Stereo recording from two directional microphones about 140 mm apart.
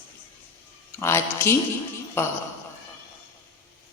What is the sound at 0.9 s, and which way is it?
Speech, 20° left (ahead or behind).